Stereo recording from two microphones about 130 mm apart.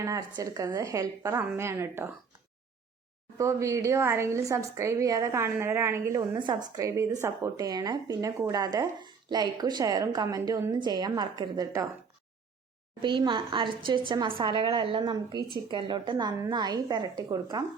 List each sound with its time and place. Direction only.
0.0 s a woman's voice: 25° right (ahead or behind)
3.3 s a woman's voice: 25° right (ahead or behind)
13.0 s a woman's voice: 40° right (ahead or behind)